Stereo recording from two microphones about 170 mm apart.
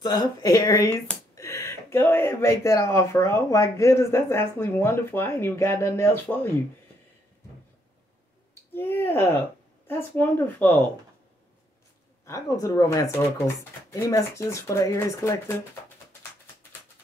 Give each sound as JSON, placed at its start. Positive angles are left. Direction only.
{"t": 0.0, "sound": "speech", "side_deg": 25}
{"t": 1.3, "sound": "a sound", "side_deg": 20}
{"t": 2.0, "sound": "speech", "side_deg": 15}
{"t": 8.7, "sound": "speech", "side_deg": 10}
{"t": 12.3, "sound": "speech", "side_deg": 20}